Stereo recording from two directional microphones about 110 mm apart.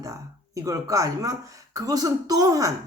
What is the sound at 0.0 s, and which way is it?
A woman's voice, 30° right (ahead or behind).